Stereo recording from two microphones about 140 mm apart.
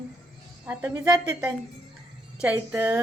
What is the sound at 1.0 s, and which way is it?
Speech, 25° right (ahead or behind).